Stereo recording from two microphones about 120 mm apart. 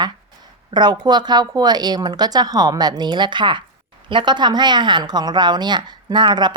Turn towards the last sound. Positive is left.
turn(degrees=-40)  # may be behind; listen again after turning